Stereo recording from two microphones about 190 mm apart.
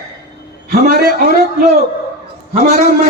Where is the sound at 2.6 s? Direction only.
60° left (ahead or behind).